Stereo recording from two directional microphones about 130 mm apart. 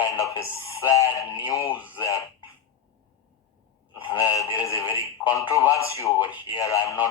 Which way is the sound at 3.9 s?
30° left (ahead or behind).